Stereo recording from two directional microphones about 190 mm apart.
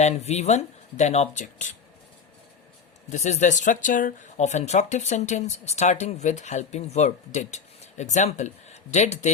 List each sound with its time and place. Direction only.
0.0 s speech: 35° left (ahead or behind)
3.1 s speech: 40° left (ahead or behind)